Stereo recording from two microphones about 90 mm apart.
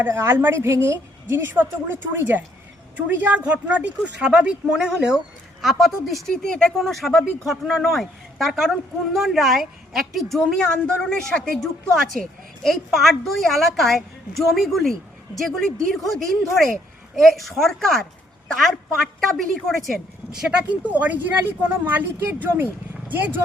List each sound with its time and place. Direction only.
0.0 s speech: 30° right (ahead or behind); by 19.9 s centre (ahead or behind)
20.3 s speech: 10° right (ahead or behind)